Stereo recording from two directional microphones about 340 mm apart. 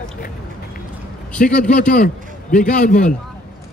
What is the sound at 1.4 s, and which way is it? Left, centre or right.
A man's voice, left.